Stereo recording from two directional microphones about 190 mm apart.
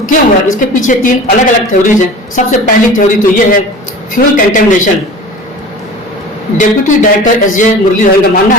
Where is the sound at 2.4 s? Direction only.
40° left (ahead or behind).